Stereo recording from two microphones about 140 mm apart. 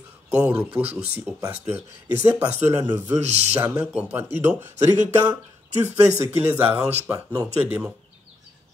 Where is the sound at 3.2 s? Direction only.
50° right (ahead or behind).